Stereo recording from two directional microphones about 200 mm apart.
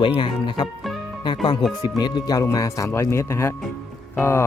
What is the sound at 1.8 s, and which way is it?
Speech, 20° left (ahead or behind).